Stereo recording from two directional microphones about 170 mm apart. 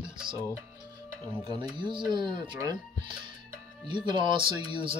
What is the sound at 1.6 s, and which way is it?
Speech, 25° right (ahead or behind).